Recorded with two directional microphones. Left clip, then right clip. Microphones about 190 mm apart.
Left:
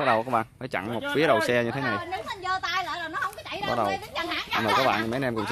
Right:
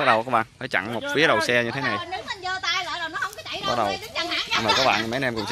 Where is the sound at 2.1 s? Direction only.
55° left (ahead or behind).